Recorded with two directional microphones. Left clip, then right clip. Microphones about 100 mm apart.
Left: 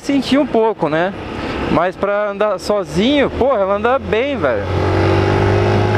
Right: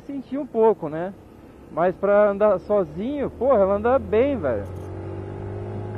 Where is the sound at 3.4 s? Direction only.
20° left (ahead or behind).